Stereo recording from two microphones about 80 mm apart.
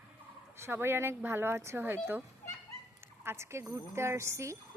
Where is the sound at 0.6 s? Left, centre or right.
Right.